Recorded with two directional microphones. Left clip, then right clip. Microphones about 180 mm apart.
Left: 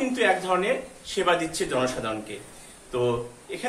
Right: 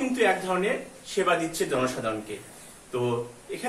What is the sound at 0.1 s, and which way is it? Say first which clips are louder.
A man's voice: left 1 dB; 20° left (ahead or behind).